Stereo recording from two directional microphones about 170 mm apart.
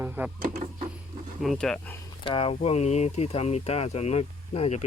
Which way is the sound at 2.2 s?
30° left (ahead or behind).